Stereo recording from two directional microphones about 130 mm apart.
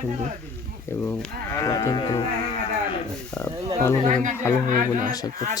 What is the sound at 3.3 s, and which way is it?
Speech, 5° left (ahead or behind).